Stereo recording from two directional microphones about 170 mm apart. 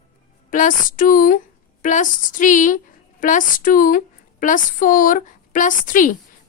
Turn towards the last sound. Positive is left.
turn(degrees=50)  # may be behind; listen again after turning